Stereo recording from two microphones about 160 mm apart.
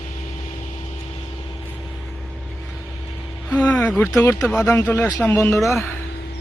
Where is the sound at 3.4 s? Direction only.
5° left (ahead or behind).